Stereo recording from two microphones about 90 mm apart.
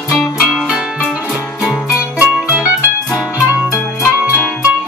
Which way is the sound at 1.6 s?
15° right (ahead or behind).